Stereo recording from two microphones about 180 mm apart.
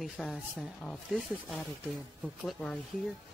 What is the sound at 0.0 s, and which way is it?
Speech, centre (ahead or behind).